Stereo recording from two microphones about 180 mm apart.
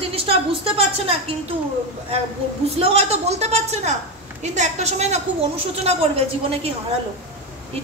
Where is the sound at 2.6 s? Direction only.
35° right (ahead or behind).